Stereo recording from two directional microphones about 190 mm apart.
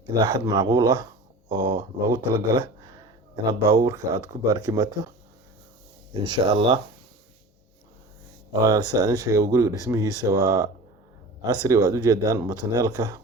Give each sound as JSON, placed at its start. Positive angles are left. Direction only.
{"t": 0.1, "sound": "speech", "side_deg": -20}
{"t": 6.2, "sound": "speech", "side_deg": -25}
{"t": 8.6, "sound": "speech", "side_deg": -20}